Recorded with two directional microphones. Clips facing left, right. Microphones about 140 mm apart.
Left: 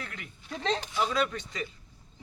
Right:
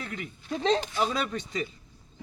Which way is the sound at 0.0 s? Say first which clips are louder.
Right 5 dB; 25° right (ahead or behind).